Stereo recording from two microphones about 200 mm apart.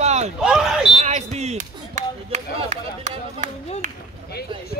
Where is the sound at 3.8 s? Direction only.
40° right (ahead or behind).